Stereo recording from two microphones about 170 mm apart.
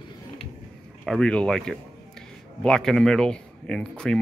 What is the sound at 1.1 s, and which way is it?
Speech, 5° left (ahead or behind).